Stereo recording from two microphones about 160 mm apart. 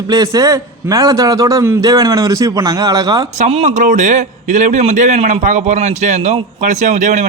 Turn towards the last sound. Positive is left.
turn(degrees=-50)  # may be behind; listen again after turning